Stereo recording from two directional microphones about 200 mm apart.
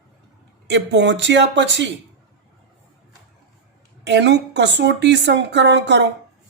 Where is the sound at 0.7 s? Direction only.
60° right (ahead or behind).